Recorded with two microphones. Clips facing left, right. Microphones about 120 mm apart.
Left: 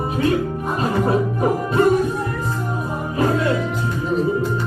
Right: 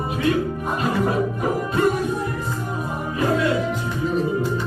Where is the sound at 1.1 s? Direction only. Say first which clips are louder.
Left 3 dB; 35° left (ahead or behind).